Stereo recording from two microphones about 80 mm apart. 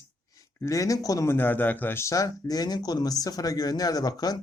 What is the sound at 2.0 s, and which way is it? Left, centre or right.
Speech, left.